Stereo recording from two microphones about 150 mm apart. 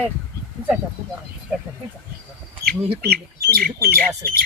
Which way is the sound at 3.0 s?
90° right.